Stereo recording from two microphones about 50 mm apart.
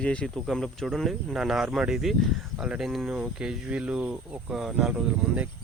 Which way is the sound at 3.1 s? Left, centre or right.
Centre.